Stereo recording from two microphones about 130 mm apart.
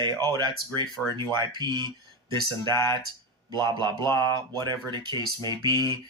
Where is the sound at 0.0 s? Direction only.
30° right (ahead or behind).